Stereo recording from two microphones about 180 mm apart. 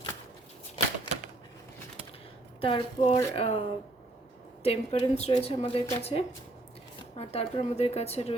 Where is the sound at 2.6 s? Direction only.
25° left (ahead or behind).